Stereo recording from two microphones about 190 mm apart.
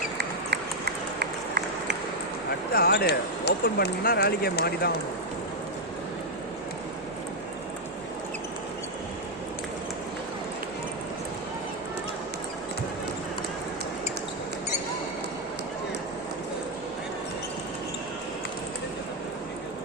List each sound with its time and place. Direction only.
0.2 s run: 60° right (ahead or behind)
2.7 s speech: 55° left (ahead or behind)